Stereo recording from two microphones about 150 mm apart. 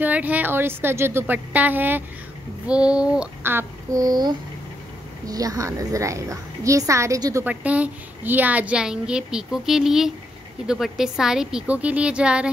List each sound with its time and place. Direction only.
0.0 s a woman's voice: 10° right (ahead or behind)
7.4 s a woman's voice: 10° right (ahead or behind)